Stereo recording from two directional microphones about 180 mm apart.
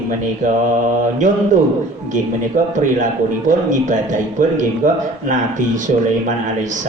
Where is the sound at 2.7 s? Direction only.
45° right (ahead or behind).